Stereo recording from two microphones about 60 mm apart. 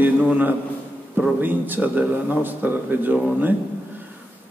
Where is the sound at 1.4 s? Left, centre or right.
Right.